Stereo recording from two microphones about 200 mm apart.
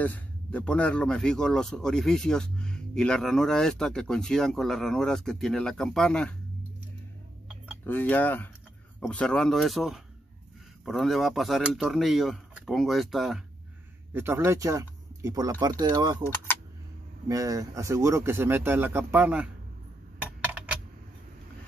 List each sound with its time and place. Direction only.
0.0 s speech: 10° left (ahead or behind)
7.8 s speech: 10° left (ahead or behind)
14.1 s speech: 10° right (ahead or behind)
17.3 s speech: 15° right (ahead or behind)
20.2 s a sound: 5° right (ahead or behind)